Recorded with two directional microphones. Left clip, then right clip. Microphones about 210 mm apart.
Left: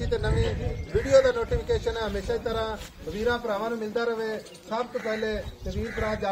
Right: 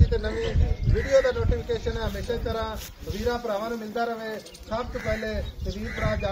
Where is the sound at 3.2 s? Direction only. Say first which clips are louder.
Left 1 dB; 20° left (ahead or behind).